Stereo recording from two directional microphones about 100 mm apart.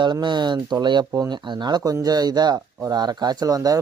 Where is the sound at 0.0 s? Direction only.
50° right (ahead or behind).